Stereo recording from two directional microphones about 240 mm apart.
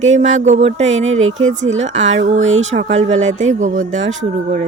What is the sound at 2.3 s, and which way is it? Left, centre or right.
Speech, right.